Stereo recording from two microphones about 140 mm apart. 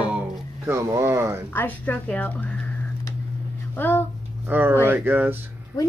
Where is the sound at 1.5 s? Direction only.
15° left (ahead or behind).